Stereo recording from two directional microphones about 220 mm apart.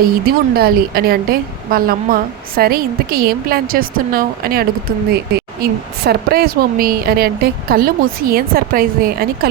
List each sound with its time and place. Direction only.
0.0 s a woman's voice: 45° right (ahead or behind)
6.1 s a woman's voice: 45° right (ahead or behind)